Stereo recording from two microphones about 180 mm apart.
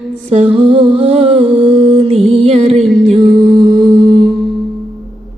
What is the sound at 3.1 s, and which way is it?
Music, 25° right (ahead or behind).